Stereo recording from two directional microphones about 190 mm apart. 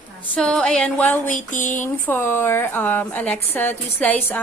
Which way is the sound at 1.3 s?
40° left (ahead or behind).